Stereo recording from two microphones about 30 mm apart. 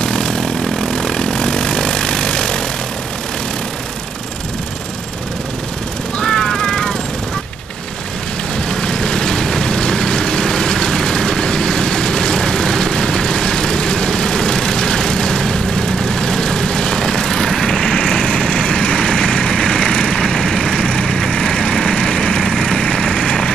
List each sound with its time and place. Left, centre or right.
0.0 s vehicle: left
6.1 s vehicle: centre
8.6 s vehicle: left
17.8 s vehicle: left
20.2 s vehicle: centre